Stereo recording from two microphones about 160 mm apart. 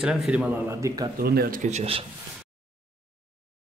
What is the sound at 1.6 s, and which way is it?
Speech, 40° right (ahead or behind).